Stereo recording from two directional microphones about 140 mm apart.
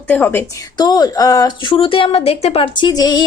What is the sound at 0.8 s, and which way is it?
A woman's voice, 30° left (ahead or behind).